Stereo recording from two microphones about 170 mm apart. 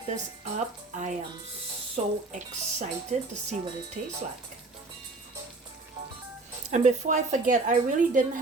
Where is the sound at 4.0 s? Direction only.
45° right (ahead or behind).